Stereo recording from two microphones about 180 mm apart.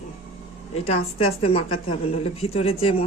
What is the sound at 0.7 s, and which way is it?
A woman's voice, 35° left (ahead or behind).